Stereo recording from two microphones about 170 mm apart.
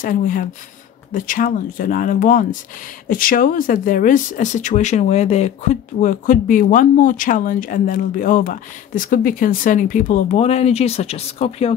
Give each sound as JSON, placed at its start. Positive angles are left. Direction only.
{"t": 0.0, "sound": "speech", "side_deg": 50}